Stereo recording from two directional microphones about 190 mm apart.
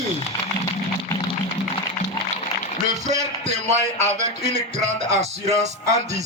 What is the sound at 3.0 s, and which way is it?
Music, 40° right (ahead or behind).